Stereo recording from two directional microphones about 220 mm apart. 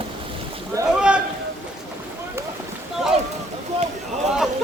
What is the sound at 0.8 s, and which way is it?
Speech, 5° right (ahead or behind).